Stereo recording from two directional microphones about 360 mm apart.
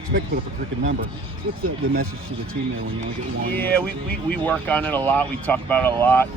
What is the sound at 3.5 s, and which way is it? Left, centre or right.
Speech, centre.